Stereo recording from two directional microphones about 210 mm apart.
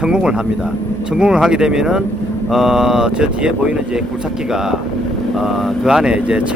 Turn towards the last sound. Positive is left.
turn(degrees=-5)  # may be behind; listen again after turning